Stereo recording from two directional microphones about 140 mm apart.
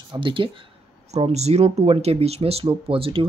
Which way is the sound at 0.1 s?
35° right (ahead or behind).